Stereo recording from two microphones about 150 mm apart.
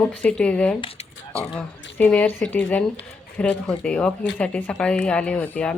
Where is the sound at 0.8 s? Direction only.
40° left (ahead or behind).